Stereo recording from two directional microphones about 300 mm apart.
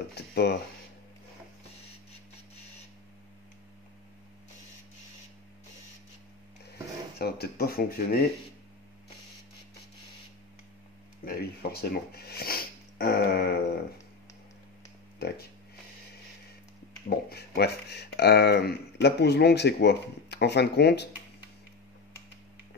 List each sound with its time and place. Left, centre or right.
0.1 s speech: left
7.2 s speech: left
11.2 s speech: left
15.1 s speech: left
17.3 s speech: left